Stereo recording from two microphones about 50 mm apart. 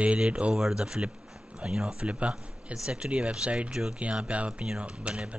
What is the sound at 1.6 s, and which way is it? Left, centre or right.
Speech, centre.